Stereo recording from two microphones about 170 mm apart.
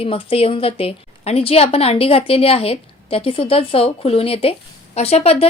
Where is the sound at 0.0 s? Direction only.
35° left (ahead or behind).